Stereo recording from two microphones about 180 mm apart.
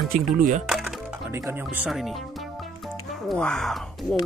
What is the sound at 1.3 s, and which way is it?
Speech, 15° right (ahead or behind).